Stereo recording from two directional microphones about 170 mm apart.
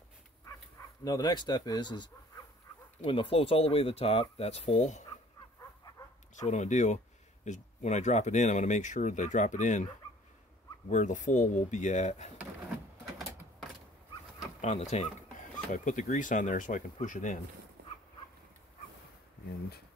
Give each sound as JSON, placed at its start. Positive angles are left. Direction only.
{"t": 0.5, "sound": "speech", "side_deg": 20}
{"t": 6.4, "sound": "speech", "side_deg": 45}
{"t": 10.9, "sound": "speech", "side_deg": 45}
{"t": 14.6, "sound": "speech", "side_deg": 40}
{"t": 17.8, "sound": "dog", "side_deg": -70}